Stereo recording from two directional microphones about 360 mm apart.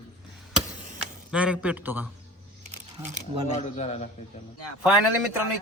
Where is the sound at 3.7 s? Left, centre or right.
Centre.